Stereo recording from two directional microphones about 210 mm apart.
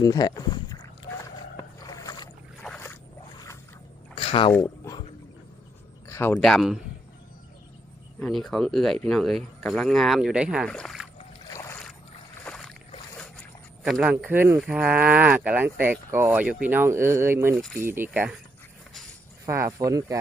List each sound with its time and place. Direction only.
0.0 s speech: 20° left (ahead or behind)
1.9 s boat: 20° left (ahead or behind)
4.1 s rowboat: 25° left (ahead or behind)
4.5 s a sound: 15° left (ahead or behind)
6.1 s speech: 15° left (ahead or behind)
6.4 s speech: centre (ahead or behind)
8.2 s speech: centre (ahead or behind)
11.3 s boat: 15° left (ahead or behind)
12.5 s boat: 5° left (ahead or behind)
13.8 s speech: 5° right (ahead or behind)
19.5 s speech: 15° right (ahead or behind)